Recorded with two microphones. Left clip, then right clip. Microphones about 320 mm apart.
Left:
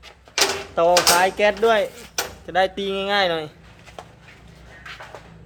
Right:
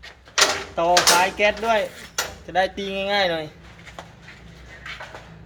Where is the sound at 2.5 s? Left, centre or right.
Centre.